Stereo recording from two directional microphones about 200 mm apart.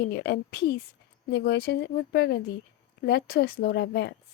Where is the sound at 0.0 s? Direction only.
55° left (ahead or behind).